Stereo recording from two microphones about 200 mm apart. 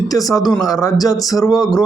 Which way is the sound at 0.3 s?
20° left (ahead or behind).